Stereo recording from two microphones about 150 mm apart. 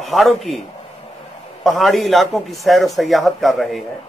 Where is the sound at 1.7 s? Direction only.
Centre (ahead or behind).